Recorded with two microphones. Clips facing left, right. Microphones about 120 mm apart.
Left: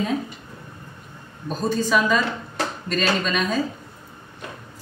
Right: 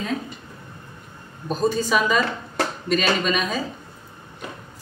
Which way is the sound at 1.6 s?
5° right (ahead or behind).